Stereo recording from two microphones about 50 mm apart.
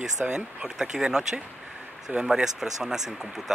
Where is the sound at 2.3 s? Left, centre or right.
Centre.